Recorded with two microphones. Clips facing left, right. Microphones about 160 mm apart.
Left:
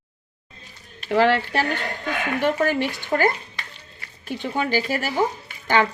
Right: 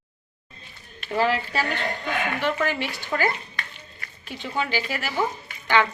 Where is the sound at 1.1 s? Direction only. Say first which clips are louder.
Left 5 dB; 75° left (ahead or behind).